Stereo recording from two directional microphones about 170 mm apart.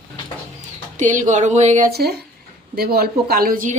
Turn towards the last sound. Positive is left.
turn(degrees=-55)  # may be behind; listen again after turning